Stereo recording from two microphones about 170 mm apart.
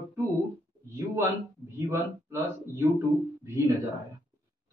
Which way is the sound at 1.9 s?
15° right (ahead or behind).